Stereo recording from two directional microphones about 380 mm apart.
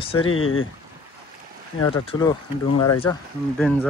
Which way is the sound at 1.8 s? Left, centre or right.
Centre.